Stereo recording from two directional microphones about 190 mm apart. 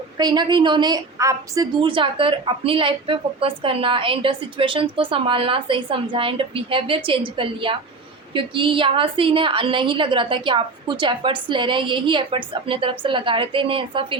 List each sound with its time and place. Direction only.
0.2 s a woman's voice: 20° right (ahead or behind)